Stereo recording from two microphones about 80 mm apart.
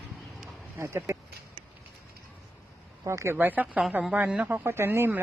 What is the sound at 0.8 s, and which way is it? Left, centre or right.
Speech, right.